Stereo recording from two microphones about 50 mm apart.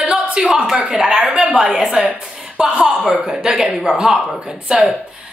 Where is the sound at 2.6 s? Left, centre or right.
Right.